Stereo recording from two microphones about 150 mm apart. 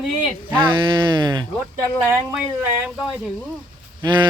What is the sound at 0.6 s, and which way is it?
Speech, 30° right (ahead or behind).